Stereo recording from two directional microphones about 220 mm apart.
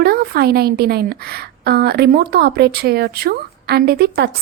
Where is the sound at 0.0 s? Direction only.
45° right (ahead or behind).